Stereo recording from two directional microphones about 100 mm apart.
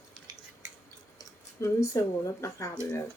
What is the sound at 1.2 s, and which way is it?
Speech, 30° left (ahead or behind).